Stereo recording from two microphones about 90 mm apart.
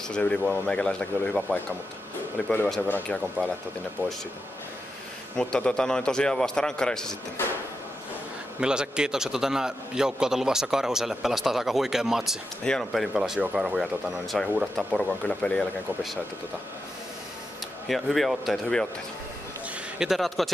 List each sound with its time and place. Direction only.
0.1 s a man's voice: 10° left (ahead or behind)
4.0 s speech: 25° right (ahead or behind)
5.4 s a man's voice: 10° left (ahead or behind)
8.5 s a man's voice: 10° right (ahead or behind)
13.7 s a man's voice: centre (ahead or behind)
17.8 s a man's voice: centre (ahead or behind)
20.0 s a man's voice: centre (ahead or behind)